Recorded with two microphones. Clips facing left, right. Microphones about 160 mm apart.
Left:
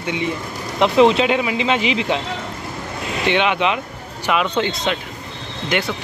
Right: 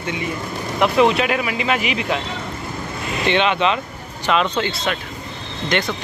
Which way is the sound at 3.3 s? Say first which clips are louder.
Even; 15° left (ahead or behind).